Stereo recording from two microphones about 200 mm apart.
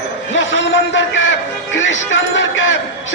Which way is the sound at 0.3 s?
70° left (ahead or behind).